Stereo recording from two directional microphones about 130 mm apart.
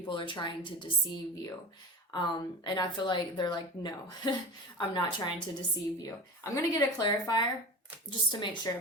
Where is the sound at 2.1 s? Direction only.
35° left (ahead or behind).